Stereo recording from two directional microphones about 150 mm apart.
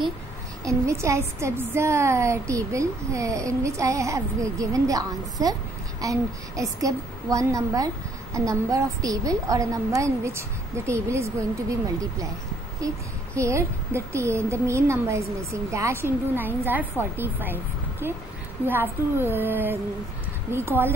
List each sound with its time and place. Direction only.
0.7 s a woman's voice: 20° right (ahead or behind)
12.8 s a woman's voice: 20° right (ahead or behind)
18.7 s a woman's voice: 15° right (ahead or behind)